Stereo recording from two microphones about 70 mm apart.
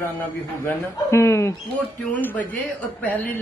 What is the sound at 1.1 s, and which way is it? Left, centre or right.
Speech, left.